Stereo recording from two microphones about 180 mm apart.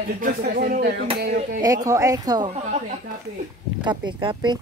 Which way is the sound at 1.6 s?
20° right (ahead or behind).